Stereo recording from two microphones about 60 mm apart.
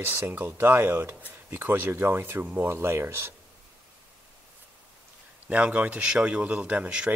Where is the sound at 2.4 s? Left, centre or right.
Right.